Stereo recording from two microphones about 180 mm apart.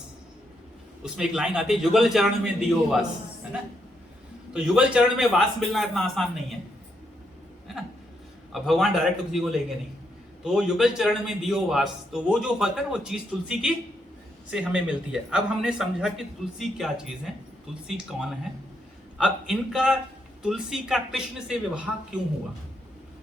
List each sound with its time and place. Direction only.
1.0 s a man's voice: 5° right (ahead or behind)
4.5 s a man's voice: 5° right (ahead or behind)
8.5 s a man's voice: centre (ahead or behind)